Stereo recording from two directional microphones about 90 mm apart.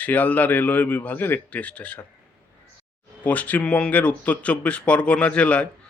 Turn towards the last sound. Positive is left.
turn(degrees=15)  # may be behind; listen again after turning